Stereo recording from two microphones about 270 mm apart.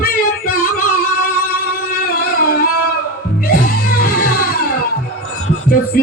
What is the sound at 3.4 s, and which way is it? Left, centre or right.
Music, left.